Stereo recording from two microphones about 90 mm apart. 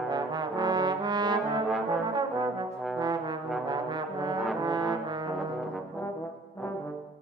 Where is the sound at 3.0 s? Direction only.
55° right (ahead or behind).